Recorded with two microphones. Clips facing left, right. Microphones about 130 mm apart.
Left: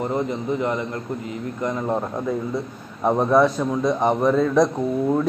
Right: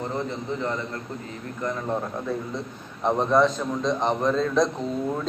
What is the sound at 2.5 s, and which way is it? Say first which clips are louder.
A man's voice: left 5 dB; 10° left (ahead or behind).